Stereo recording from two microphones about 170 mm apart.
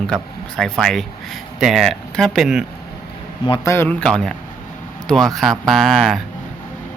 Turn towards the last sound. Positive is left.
turn(degrees=0)  # may be behind; listen again after turning